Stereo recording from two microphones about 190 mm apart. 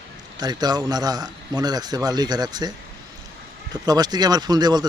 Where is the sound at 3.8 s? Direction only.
20° right (ahead or behind).